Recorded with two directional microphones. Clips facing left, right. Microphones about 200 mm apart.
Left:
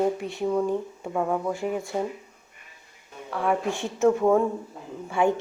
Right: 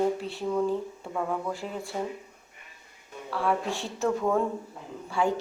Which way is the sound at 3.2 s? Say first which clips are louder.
Left 2 dB; 20° left (ahead or behind).